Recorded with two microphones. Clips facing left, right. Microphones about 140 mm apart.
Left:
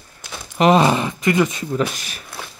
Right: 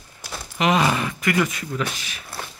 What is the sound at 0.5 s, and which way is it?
Speech, 35° left (ahead or behind).